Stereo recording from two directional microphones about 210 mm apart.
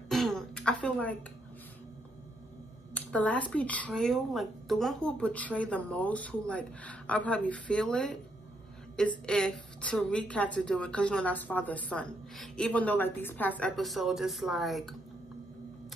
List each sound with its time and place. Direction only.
0.1 s throat clearing: centre (ahead or behind)
2.9 s a woman's voice: 5° left (ahead or behind)